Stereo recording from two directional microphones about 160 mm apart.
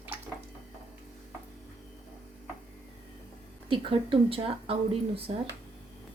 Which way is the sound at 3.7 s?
35° right (ahead or behind).